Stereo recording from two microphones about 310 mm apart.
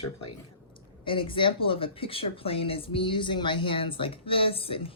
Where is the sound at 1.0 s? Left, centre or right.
Centre.